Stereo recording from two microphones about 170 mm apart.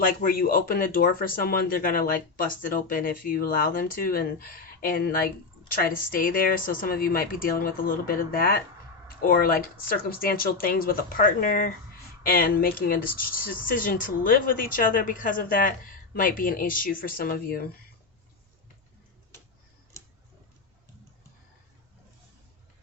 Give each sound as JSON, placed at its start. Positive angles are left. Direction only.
{"t": 0.0, "sound": "speech", "side_deg": 55}